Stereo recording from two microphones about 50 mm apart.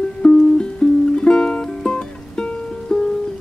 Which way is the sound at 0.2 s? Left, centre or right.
Centre.